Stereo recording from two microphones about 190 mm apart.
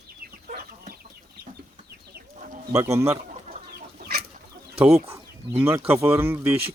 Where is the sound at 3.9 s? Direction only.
55° right (ahead or behind).